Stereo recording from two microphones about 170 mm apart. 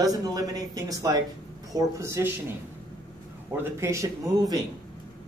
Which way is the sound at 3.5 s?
15° right (ahead or behind).